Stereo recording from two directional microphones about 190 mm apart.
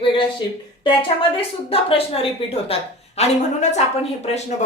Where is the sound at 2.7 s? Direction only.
30° left (ahead or behind).